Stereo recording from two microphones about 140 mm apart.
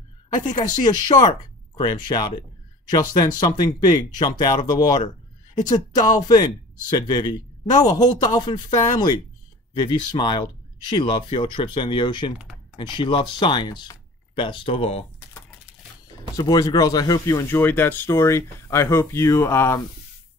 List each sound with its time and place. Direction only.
0.5 s speech: 30° left (ahead or behind)
16.3 s speech: 30° left (ahead or behind)